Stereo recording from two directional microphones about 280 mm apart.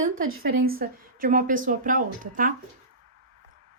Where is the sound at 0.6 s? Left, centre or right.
Right.